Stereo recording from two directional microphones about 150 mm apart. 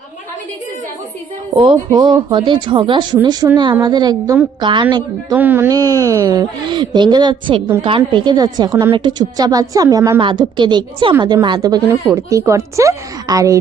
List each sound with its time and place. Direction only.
1.5 s a woman's voice: 35° right (ahead or behind)
5.3 s a woman's voice: 15° right (ahead or behind)